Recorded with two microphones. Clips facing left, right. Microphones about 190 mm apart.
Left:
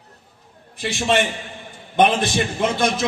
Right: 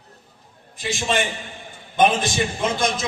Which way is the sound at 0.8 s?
60° left (ahead or behind).